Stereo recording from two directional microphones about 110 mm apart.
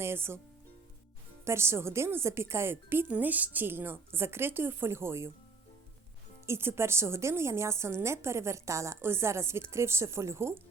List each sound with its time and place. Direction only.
0.0 s a woman's voice: 20° right (ahead or behind)
1.5 s a woman's voice: 25° right (ahead or behind)
6.4 s a woman's voice: 25° right (ahead or behind)